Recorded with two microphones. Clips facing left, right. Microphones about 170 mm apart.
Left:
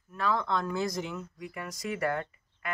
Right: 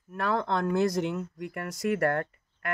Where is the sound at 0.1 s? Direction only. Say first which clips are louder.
Right 2 dB; 60° right (ahead or behind).